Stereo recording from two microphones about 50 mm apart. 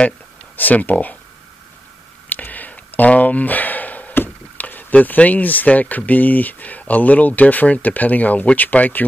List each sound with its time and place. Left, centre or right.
0.6 s speech: left
2.2 s a sound: left
4.1 s speech: left